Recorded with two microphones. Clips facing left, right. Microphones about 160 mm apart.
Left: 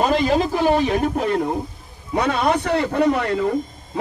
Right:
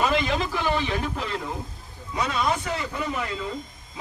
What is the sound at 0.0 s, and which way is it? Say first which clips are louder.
A man's voice: left 6 dB; 40° left (ahead or behind).